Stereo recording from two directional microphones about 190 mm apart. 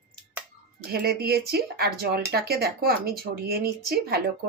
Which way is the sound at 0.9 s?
55° right (ahead or behind).